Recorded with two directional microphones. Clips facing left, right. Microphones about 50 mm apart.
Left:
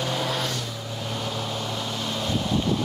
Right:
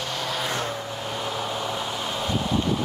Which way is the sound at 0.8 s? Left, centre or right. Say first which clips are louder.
Right 1 dB; centre.